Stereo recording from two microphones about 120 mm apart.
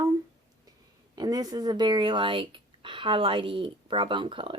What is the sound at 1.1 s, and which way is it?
Speech, 35° right (ahead or behind).